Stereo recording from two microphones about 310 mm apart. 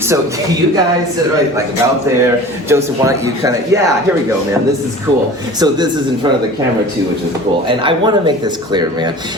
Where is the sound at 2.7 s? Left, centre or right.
Centre.